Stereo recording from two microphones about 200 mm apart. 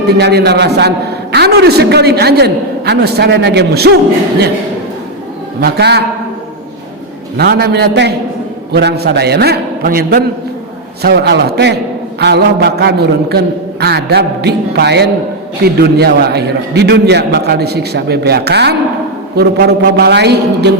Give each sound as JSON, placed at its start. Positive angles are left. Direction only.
{"t": 0.2, "sound": "a man's voice", "side_deg": -55}
{"t": 5.5, "sound": "a man's voice", "side_deg": -55}
{"t": 7.3, "sound": "a man's voice", "side_deg": -55}